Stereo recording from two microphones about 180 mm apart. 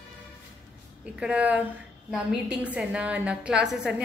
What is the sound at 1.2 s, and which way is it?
A woman's voice, 5° right (ahead or behind).